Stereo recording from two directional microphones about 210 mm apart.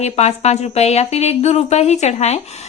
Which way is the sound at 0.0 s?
30° left (ahead or behind).